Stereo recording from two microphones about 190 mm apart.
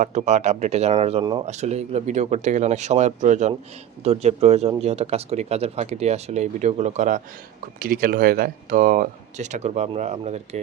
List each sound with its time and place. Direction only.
0.0 s speech: 35° right (ahead or behind)
1.2 s speech: 20° right (ahead or behind)
1.5 s speech: 35° right (ahead or behind)
7.8 s speech: 50° right (ahead or behind)